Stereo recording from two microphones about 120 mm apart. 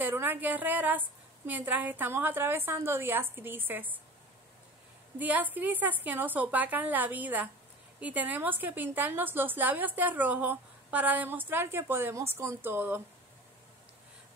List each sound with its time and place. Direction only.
0.0 s a woman's voice: 15° right (ahead or behind)
5.2 s a woman's voice: 15° right (ahead or behind)